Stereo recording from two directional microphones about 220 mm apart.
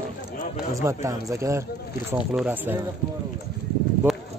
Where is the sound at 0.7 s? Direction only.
15° right (ahead or behind).